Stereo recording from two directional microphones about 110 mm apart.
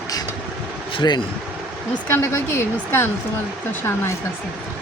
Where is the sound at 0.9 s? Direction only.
40° left (ahead or behind).